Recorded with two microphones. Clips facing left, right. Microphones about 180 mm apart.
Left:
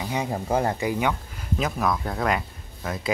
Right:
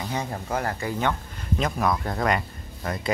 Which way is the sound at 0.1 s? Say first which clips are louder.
Left 4 dB; 10° left (ahead or behind).